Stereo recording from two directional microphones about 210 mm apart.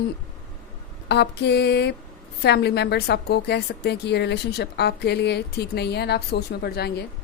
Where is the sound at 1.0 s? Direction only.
55° left (ahead or behind).